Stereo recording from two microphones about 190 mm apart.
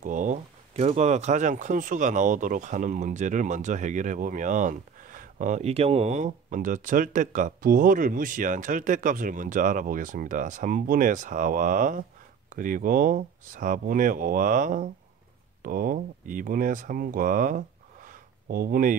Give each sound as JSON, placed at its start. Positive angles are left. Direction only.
{"t": 0.0, "sound": "speech", "side_deg": -40}